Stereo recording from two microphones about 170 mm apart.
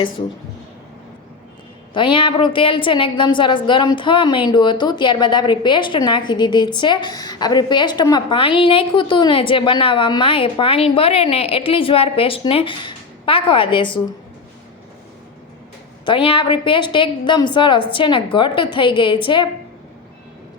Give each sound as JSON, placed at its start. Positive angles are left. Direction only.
{"t": 1.9, "sound": "a woman's voice", "side_deg": 30}
{"t": 16.0, "sound": "a woman's voice", "side_deg": 30}